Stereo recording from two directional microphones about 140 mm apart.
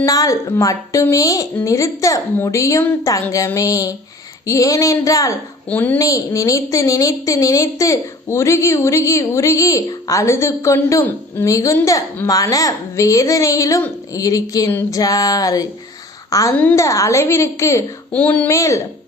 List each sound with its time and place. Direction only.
0.0 s a woman's voice: 25° left (ahead or behind)
5.6 s speech: 10° left (ahead or behind)
6.0 s a woman's voice: 25° left (ahead or behind)
14.7 s speech: 15° left (ahead or behind)
14.9 s a woman's voice: 25° left (ahead or behind)
16.6 s speech: 10° left (ahead or behind)
16.8 s a woman's voice: 20° left (ahead or behind)
18.1 s speech: 10° left (ahead or behind)